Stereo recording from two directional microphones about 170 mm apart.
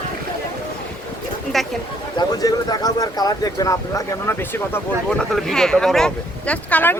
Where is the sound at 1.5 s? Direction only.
Centre (ahead or behind).